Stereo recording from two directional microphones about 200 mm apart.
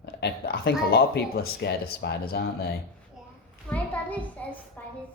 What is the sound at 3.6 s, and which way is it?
Speech, 5° left (ahead or behind).